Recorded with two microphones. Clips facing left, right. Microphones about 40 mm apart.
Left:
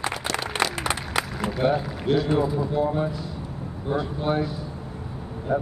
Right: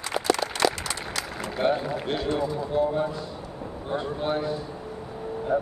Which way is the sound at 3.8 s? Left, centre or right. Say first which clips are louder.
Left 2 dB; centre.